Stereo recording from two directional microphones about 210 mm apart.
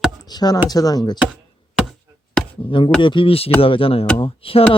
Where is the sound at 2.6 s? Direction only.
25° left (ahead or behind).